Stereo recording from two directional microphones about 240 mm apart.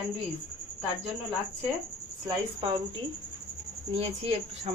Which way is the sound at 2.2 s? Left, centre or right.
Centre.